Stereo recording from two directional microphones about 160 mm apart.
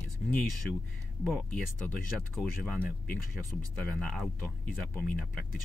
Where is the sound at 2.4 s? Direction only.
5° left (ahead or behind).